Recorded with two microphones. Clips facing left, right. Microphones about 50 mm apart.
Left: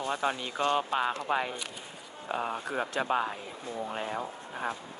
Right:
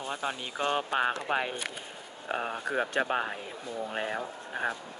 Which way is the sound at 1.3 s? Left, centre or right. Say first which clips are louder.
Left 3 dB; right.